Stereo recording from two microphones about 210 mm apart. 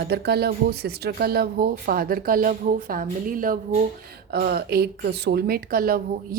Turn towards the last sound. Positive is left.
turn(degrees=-45)  # may be behind; listen again after turning